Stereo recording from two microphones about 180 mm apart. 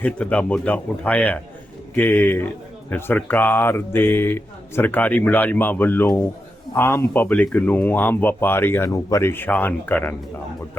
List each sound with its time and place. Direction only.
0.0 s speech: 5° left (ahead or behind)